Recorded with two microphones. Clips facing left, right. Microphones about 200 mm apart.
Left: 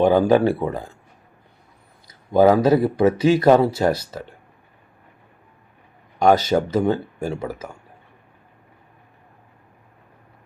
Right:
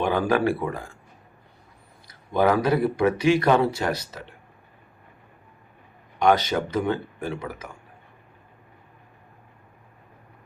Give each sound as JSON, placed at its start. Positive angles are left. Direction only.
{"t": 0.0, "sound": "speech", "side_deg": 25}
{"t": 2.4, "sound": "speech", "side_deg": 25}
{"t": 6.2, "sound": "speech", "side_deg": 30}